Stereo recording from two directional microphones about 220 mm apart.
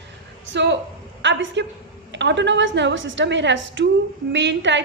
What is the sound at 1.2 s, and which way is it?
A woman's voice, 55° right (ahead or behind).